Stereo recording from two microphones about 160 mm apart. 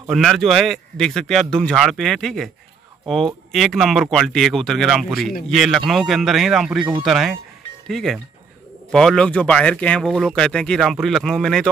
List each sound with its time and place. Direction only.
0.1 s a man's voice: centre (ahead or behind)
3.5 s a man's voice: centre (ahead or behind)
6.8 s speech: 30° right (ahead or behind)
7.1 s a man's voice: centre (ahead or behind)